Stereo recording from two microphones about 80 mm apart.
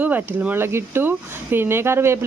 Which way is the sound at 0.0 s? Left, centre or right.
Right.